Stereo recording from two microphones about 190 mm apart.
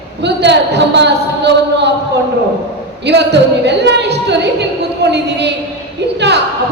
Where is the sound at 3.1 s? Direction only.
65° right (ahead or behind).